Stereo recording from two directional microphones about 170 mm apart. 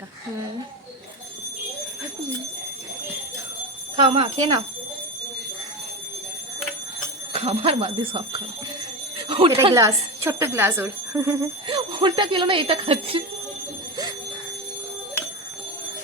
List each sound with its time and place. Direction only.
3.9 s speech: 30° right (ahead or behind)
7.3 s speech: 35° right (ahead or behind)
9.1 s bicycle bell: 30° right (ahead or behind)
9.7 s speech: 15° right (ahead or behind)
11.7 s speech: 25° right (ahead or behind)